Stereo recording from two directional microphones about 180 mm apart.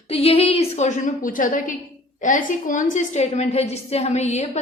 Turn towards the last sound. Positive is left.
turn(degrees=40)  # may be behind; listen again after turning